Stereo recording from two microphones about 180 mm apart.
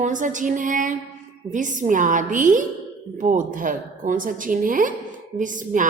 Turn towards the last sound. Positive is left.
turn(degrees=-45)  # may be behind; listen again after turning